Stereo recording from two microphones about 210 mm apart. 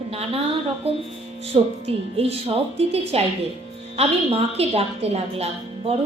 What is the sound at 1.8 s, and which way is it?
A woman's voice, 30° right (ahead or behind).